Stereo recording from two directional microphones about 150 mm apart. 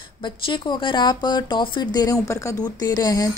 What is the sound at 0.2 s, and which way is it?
Speech, 35° left (ahead or behind).